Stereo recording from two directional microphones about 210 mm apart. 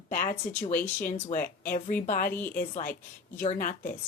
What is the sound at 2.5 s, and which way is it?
A woman's voice, 40° left (ahead or behind).